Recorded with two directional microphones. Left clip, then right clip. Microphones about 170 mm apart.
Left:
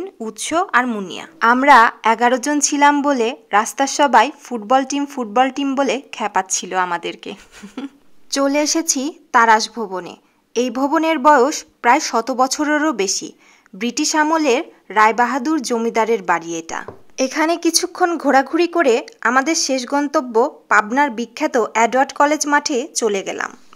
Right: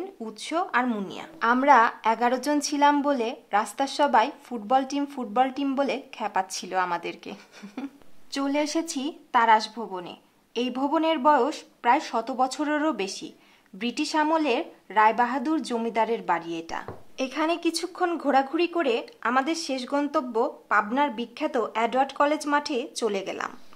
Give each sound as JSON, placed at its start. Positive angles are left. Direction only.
{"t": 0.2, "sound": "a woman's voice", "side_deg": 35}
{"t": 8.3, "sound": "a woman's voice", "side_deg": 35}